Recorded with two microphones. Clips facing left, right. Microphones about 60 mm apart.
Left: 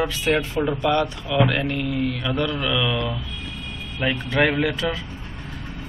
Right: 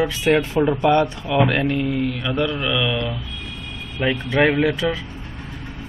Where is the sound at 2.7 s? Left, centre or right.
Centre.